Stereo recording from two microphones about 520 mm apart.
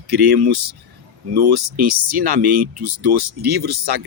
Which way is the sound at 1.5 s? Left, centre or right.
Right.